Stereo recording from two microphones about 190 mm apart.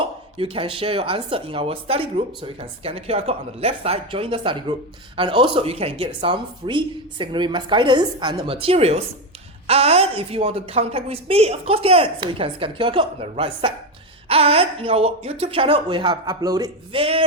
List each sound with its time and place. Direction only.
0.0 s a woman's voice: 30° right (ahead or behind)